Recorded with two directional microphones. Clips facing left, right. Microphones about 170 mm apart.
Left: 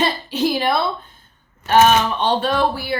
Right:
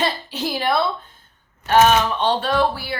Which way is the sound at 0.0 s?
20° left (ahead or behind).